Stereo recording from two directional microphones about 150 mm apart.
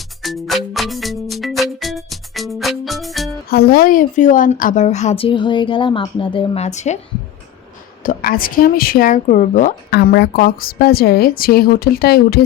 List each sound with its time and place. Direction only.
0.2 s music: centre (ahead or behind)
3.5 s speech: 90° left; by 7.0 s 50° left (ahead or behind)
8.0 s speech: 75° left (ahead or behind); by 12.4 s 90° left